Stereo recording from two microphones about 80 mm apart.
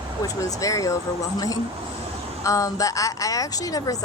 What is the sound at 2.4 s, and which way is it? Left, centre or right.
Speech, left.